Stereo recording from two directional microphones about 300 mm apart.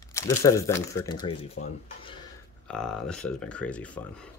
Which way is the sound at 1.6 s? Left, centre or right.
Left.